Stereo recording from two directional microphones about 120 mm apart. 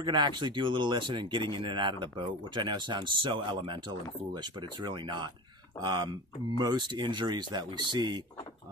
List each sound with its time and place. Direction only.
0.0 s speech: 40° right (ahead or behind)